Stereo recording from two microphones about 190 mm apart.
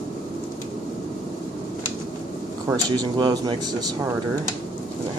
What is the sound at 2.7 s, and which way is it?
Speech, 20° right (ahead or behind).